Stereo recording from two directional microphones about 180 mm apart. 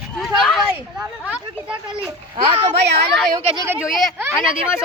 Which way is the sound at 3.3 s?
15° right (ahead or behind).